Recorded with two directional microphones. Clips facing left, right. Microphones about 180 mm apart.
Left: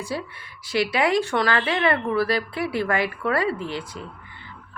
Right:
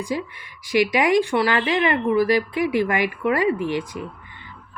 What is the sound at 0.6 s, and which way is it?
A woman's voice, 15° right (ahead or behind).